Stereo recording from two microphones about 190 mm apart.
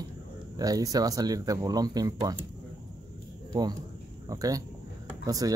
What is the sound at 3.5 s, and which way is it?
A man's voice, 20° right (ahead or behind).